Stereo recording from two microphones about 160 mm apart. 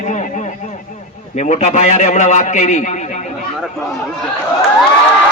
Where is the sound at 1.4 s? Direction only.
45° left (ahead or behind).